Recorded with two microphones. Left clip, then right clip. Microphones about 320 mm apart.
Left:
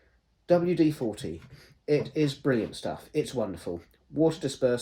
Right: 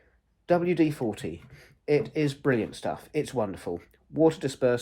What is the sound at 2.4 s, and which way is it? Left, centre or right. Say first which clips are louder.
Speech: right 1 dB; centre.